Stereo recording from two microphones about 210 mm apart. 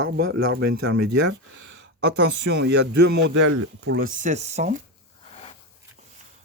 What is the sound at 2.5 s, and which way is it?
Speech, 55° right (ahead or behind).